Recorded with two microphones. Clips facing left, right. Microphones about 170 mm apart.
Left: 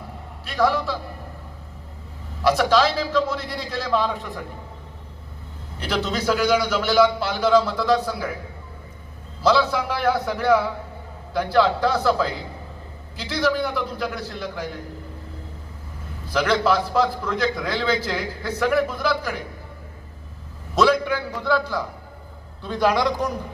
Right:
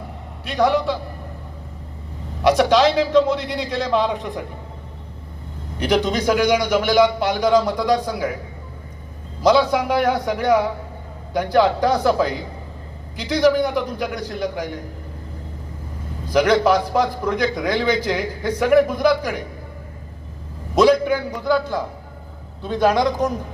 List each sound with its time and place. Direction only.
0.4 s a man's voice: 20° right (ahead or behind)
2.4 s a man's voice: 20° right (ahead or behind)
5.8 s a man's voice: 15° right (ahead or behind)
9.4 s a man's voice: 15° right (ahead or behind)
16.3 s a man's voice: 15° right (ahead or behind)
20.7 s a man's voice: 15° right (ahead or behind)
22.6 s a man's voice: 20° right (ahead or behind)